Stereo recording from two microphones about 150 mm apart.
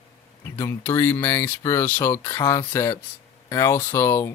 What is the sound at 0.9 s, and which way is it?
Speech, 15° left (ahead or behind).